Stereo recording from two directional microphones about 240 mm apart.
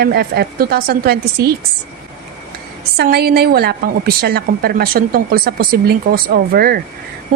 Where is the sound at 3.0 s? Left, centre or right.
Right.